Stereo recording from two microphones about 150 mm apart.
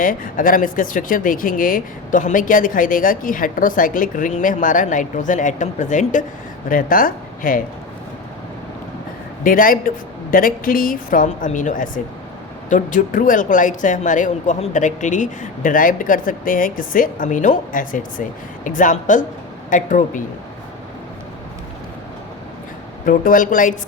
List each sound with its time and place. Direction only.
0.0 s speech: 65° left (ahead or behind)
9.4 s speech: 70° left (ahead or behind)
23.0 s speech: 65° left (ahead or behind)